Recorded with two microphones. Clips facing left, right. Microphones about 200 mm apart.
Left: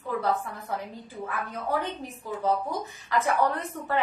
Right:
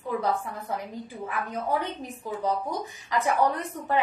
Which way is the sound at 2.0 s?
15° right (ahead or behind).